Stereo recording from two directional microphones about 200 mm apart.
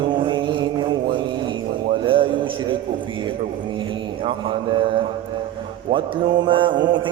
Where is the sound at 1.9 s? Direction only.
25° right (ahead or behind).